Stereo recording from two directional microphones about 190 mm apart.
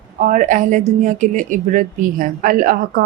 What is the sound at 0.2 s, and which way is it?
A woman's voice, 40° right (ahead or behind).